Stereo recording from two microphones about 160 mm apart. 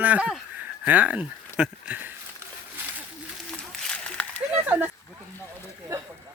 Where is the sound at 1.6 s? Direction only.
10° right (ahead or behind).